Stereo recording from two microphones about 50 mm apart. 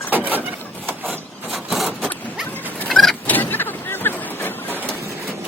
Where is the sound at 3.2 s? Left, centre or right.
Left.